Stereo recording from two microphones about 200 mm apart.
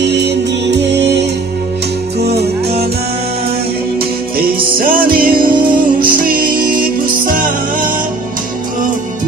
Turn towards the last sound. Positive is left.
turn(degrees=-45)  # may be behind; listen again after turning